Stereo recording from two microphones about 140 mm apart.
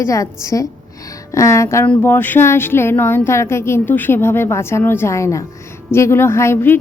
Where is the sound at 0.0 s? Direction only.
20° left (ahead or behind).